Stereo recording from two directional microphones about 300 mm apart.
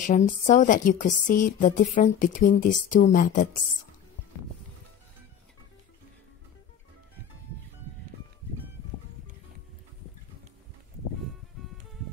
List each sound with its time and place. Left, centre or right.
0.0 s a woman's voice: left